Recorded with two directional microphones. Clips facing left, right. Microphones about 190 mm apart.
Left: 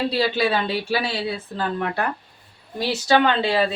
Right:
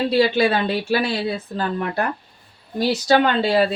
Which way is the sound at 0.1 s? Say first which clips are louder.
Right 4 dB; 50° right (ahead or behind).